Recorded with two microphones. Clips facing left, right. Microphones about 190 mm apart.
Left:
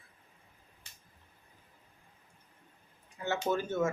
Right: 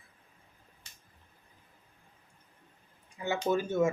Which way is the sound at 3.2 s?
10° right (ahead or behind).